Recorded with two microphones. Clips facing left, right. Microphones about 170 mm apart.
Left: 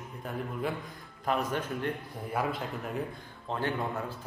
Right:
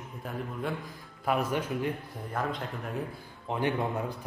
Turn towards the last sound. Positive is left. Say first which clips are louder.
# right 3 dB
turn(degrees=-15)  # may be behind; listen again after turning